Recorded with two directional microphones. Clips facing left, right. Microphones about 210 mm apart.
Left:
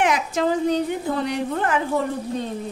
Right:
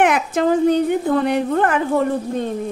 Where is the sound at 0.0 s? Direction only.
55° right (ahead or behind).